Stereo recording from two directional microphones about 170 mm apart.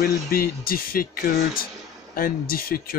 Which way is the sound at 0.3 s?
60° left (ahead or behind).